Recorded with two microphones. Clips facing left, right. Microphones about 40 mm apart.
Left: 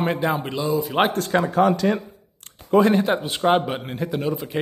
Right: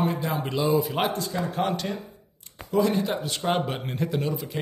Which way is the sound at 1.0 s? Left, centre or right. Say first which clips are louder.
Left 6 dB; left.